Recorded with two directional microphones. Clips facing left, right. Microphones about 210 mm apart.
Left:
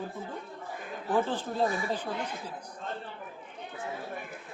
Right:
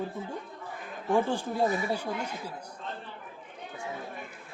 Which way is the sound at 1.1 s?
10° right (ahead or behind).